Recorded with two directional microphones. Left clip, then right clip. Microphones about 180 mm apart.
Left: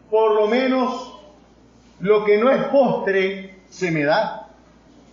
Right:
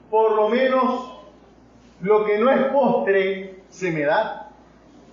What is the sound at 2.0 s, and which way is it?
Speech, 45° left (ahead or behind).